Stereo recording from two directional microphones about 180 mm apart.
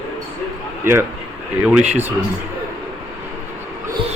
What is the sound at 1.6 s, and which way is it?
Speech, 5° right (ahead or behind).